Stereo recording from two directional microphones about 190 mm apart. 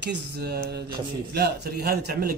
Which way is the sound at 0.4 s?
60° right (ahead or behind).